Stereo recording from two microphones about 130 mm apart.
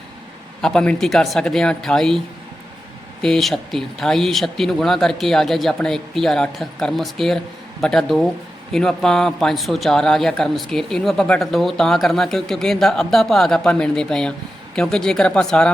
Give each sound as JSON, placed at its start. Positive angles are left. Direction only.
{"t": 0.6, "sound": "speech", "side_deg": 5}